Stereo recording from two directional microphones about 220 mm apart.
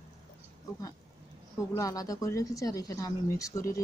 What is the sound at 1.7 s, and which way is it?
Speech, 15° left (ahead or behind).